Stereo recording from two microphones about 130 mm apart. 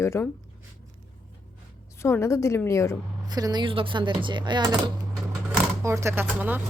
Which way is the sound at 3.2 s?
30° right (ahead or behind).